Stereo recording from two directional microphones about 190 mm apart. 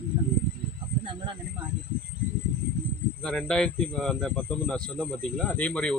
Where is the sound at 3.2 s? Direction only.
5° left (ahead or behind).